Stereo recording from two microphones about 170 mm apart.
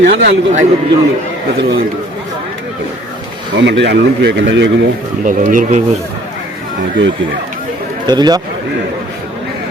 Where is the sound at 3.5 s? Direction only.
90° right.